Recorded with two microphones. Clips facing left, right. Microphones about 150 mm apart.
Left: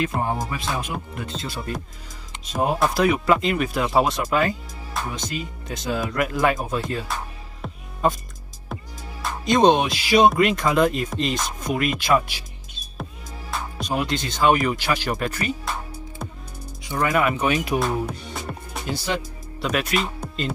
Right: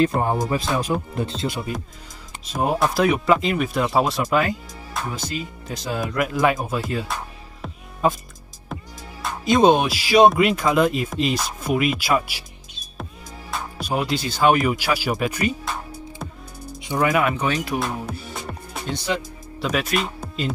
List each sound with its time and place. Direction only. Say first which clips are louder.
0.0 s speech: right 5 dB; 35° right (ahead or behind)
2.4 s speech: even; centre (ahead or behind)
7.6 s music: right 1 dB; centre (ahead or behind)
9.2 s speech: right 1 dB; 5° right (ahead or behind)
13.5 s speech: right 1 dB; 5° right (ahead or behind)
16.8 s speech: right 3 dB; 15° right (ahead or behind)
17.1 s speech: even; centre (ahead or behind)
18.3 s music: even; centre (ahead or behind)
19.6 s speech: right 1 dB; centre (ahead or behind)